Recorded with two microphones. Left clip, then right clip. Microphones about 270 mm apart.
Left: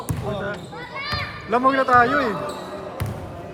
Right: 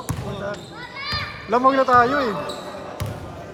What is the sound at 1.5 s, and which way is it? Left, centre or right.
Speech, right.